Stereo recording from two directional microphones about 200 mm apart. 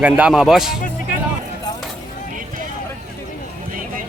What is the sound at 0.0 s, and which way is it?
Speech, 5° right (ahead or behind).